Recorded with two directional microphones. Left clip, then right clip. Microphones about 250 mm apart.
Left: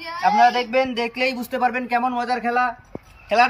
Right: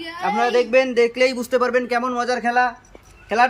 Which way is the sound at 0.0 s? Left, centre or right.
Centre.